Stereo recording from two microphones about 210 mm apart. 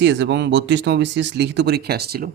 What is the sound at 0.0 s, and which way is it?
Speech, 55° right (ahead or behind).